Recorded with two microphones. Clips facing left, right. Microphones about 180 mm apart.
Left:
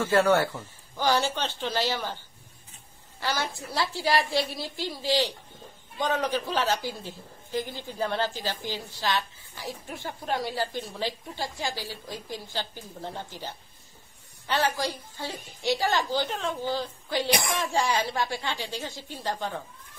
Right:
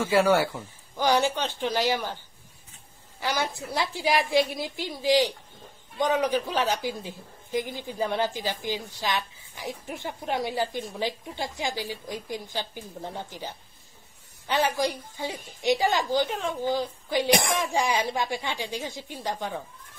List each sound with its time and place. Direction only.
0.0 s a woman's voice: 10° right (ahead or behind)
3.2 s a woman's voice: 15° right (ahead or behind)
14.5 s a woman's voice: 15° right (ahead or behind)